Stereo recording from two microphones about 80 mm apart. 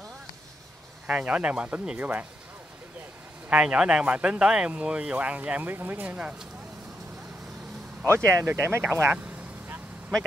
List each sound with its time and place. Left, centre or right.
1.0 s speech: centre
3.4 s speech: centre
8.0 s speech: right